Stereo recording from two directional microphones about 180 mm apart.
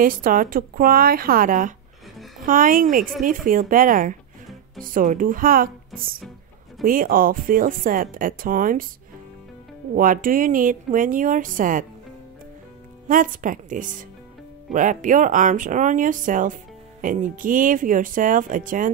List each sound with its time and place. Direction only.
0.0 s a woman's voice: 50° right (ahead or behind)
9.9 s a woman's voice: 50° right (ahead or behind)
13.1 s a woman's voice: 50° right (ahead or behind)